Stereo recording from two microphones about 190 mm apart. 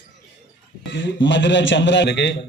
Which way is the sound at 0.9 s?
70° left (ahead or behind).